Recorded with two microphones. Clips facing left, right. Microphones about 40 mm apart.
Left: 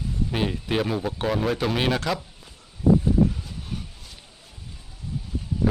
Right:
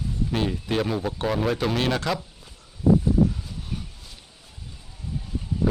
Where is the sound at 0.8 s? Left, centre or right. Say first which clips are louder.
Even; centre.